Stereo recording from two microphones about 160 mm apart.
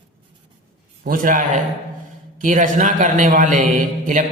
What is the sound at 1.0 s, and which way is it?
A man's voice, 55° right (ahead or behind).